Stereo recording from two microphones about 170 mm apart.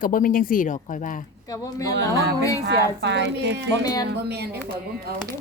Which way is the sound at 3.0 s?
90° right.